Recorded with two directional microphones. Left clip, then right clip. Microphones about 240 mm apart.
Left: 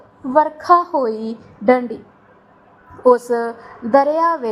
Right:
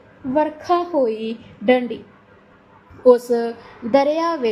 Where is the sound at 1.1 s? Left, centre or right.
Centre.